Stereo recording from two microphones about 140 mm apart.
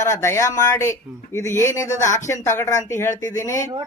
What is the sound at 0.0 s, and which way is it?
Speech, 20° left (ahead or behind).